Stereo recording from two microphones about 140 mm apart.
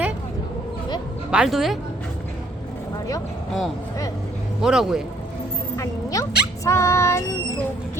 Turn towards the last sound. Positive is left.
turn(degrees=20)  # may be behind; listen again after turning